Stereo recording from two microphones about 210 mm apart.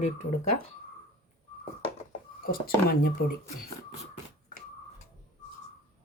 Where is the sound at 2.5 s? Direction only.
45° left (ahead or behind).